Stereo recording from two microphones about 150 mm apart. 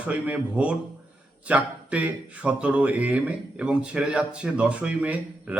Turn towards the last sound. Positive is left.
turn(degrees=-10)  # may be behind; listen again after turning